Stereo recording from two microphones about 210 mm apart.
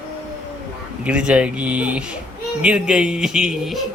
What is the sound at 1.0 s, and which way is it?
Speech, 5° right (ahead or behind).